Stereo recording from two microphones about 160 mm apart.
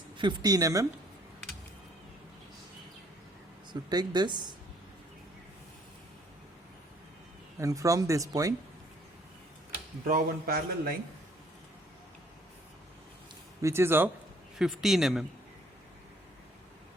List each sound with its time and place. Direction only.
0.2 s speech: 25° right (ahead or behind)
3.7 s speech: 25° right (ahead or behind)
7.6 s speech: 20° right (ahead or behind)
10.1 s a man's voice: 65° right (ahead or behind)
13.6 s speech: 15° right (ahead or behind)
14.6 s speech: centre (ahead or behind)